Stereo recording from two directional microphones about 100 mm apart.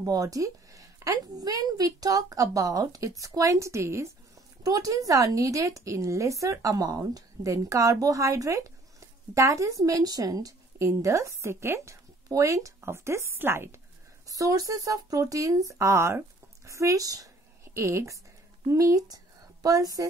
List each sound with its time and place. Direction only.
0.0 s a woman's voice: 35° right (ahead or behind)
14.2 s a woman's voice: 35° right (ahead or behind)